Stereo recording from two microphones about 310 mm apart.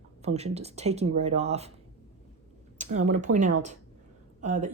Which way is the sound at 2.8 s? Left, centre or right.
Right.